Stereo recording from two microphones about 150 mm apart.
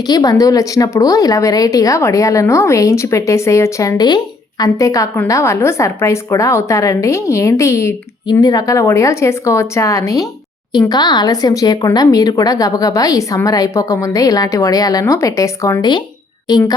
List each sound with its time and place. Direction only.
0.1 s a woman's voice: 25° left (ahead or behind)